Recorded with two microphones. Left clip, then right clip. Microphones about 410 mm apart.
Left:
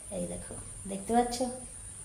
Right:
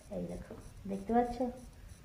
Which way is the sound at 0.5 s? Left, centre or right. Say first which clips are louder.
Left 4 dB; right.